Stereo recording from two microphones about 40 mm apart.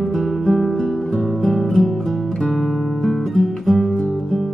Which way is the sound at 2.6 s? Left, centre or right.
Centre.